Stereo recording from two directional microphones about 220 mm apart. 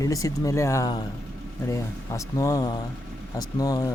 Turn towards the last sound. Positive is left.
turn(degrees=15)  # may be behind; listen again after turning